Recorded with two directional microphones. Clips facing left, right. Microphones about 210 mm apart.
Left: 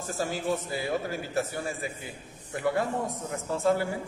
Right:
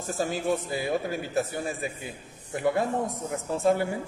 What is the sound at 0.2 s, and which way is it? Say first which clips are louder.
A man's voice: right 2 dB; 20° right (ahead or behind).